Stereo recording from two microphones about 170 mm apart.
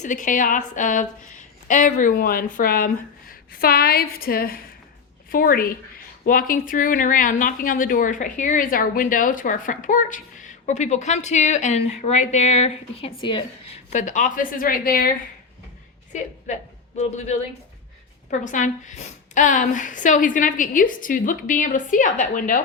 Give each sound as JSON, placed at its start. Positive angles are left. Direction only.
{"t": 0.0, "sound": "speech", "side_deg": 50}
{"t": 13.9, "sound": "speech", "side_deg": 45}
{"t": 16.1, "sound": "a man's voice", "side_deg": 45}